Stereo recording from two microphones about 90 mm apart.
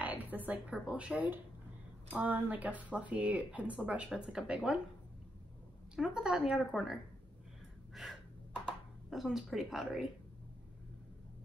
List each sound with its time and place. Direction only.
0.0 s music: 20° right (ahead or behind)
0.5 s speech: 10° right (ahead or behind)
5.9 s speech: 10° right (ahead or behind)
7.9 s gasp: centre (ahead or behind)
9.1 s speech: centre (ahead or behind)